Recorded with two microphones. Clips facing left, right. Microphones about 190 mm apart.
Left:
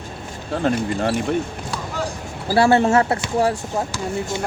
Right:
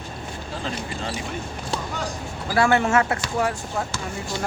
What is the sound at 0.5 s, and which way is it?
Speech, 60° left (ahead or behind).